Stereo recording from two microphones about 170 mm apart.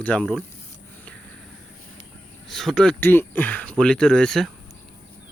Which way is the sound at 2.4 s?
Centre (ahead or behind).